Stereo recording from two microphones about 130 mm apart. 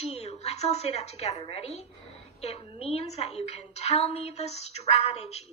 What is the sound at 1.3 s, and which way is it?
A woman's voice, 45° left (ahead or behind).